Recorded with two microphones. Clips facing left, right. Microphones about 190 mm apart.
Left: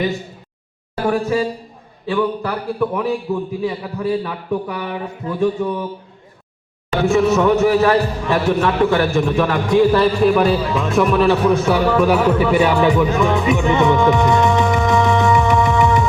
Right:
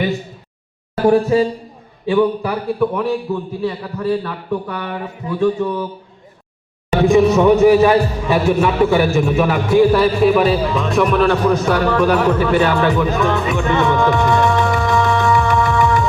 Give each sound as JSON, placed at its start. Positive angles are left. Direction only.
{"t": 1.0, "sound": "speech", "side_deg": -30}
{"t": 2.0, "sound": "a man's voice", "side_deg": -10}
{"t": 2.9, "sound": "a man's voice", "side_deg": 5}
{"t": 7.0, "sound": "speech", "side_deg": -15}
{"t": 13.1, "sound": "music", "side_deg": 15}